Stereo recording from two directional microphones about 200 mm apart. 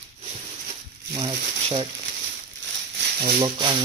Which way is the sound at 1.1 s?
20° right (ahead or behind).